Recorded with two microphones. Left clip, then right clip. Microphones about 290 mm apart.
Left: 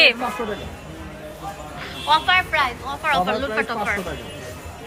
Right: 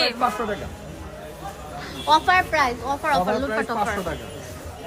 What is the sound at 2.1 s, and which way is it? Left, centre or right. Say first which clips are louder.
A woman's voice: even; centre.